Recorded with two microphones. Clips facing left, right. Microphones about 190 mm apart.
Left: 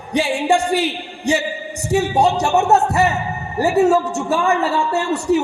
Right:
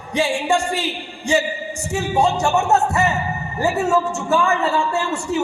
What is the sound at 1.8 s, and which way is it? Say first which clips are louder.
A man's voice: left 3 dB; 35° left (ahead or behind).